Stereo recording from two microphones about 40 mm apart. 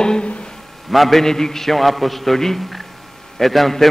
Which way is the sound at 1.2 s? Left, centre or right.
Centre.